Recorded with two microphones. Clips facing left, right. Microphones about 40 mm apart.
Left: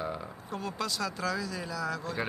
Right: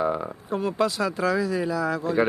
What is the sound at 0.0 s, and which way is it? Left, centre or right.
Speech, right.